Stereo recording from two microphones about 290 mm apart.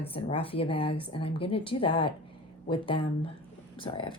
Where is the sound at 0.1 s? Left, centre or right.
Centre.